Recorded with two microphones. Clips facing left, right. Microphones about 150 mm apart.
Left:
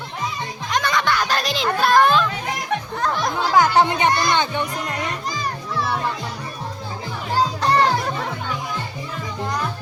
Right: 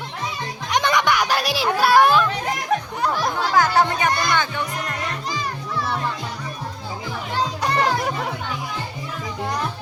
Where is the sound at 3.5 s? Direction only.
20° left (ahead or behind).